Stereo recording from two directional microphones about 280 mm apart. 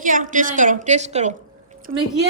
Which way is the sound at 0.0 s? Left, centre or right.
Right.